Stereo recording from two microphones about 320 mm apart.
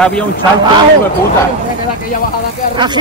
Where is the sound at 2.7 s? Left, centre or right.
Centre.